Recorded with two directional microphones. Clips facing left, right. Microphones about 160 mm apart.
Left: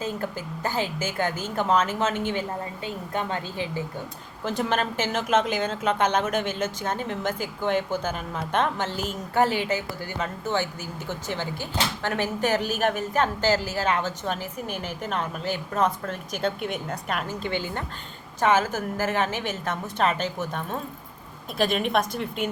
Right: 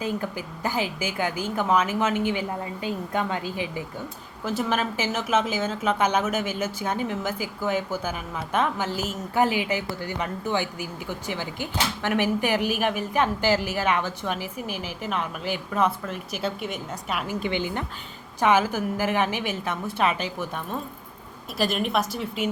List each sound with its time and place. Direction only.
0.0 s a woman's voice: 15° right (ahead or behind)
17.2 s a woman's voice: 15° right (ahead or behind)
21.6 s a woman's voice: centre (ahead or behind)